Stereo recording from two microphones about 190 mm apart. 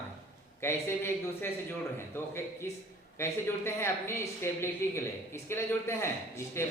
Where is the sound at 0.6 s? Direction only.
15° left (ahead or behind).